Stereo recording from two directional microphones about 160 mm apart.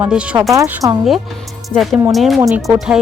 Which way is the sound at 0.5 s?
20° right (ahead or behind).